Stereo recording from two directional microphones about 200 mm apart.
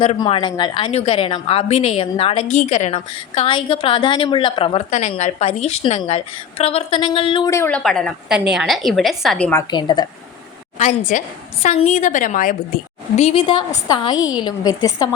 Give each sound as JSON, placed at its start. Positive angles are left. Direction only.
{"t": 0.0, "sound": "a woman's voice", "side_deg": 25}
{"t": 7.8, "sound": "a woman's voice", "side_deg": 0}
{"t": 9.5, "sound": "a woman's voice", "side_deg": 20}
{"t": 10.8, "sound": "a woman's voice", "side_deg": 35}
{"t": 13.1, "sound": "a woman's voice", "side_deg": 30}